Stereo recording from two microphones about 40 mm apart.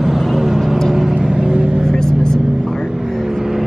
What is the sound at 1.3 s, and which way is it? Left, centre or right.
Vehicle, right.